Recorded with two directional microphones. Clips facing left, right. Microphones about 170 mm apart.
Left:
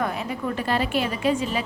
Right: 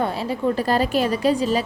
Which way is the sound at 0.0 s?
30° right (ahead or behind).